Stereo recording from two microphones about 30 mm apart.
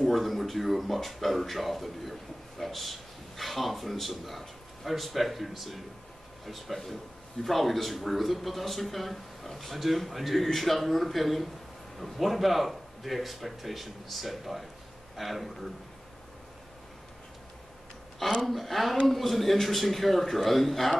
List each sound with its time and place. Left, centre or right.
0.1 s speech: centre
18.5 s speech: centre